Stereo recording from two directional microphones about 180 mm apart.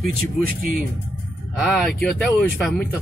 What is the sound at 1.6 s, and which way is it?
Speech, 5° left (ahead or behind).